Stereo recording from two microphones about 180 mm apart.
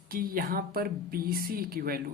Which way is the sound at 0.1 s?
50° right (ahead or behind).